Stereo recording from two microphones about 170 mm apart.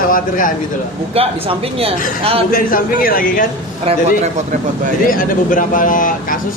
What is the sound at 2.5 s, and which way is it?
Speech, 55° left (ahead or behind).